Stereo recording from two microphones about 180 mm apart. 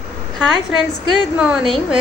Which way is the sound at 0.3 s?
Centre (ahead or behind).